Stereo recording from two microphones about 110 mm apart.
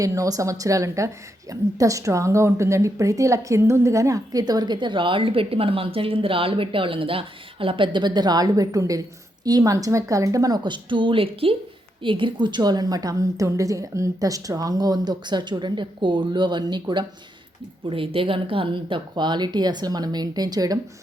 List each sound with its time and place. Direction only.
0.0 s a woman's voice: 30° right (ahead or behind)
17.8 s a woman's voice: 55° right (ahead or behind); by 20.7 s 35° right (ahead or behind)